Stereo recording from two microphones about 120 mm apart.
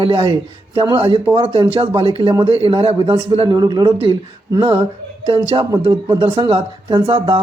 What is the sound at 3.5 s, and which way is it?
Speech, 35° right (ahead or behind).